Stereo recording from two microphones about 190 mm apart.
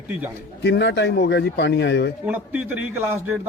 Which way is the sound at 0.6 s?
65° left (ahead or behind).